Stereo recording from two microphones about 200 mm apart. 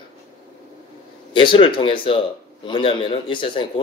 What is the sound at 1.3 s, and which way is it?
Speech, 25° left (ahead or behind).